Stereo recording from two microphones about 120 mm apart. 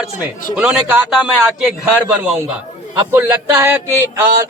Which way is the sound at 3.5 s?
25° right (ahead or behind).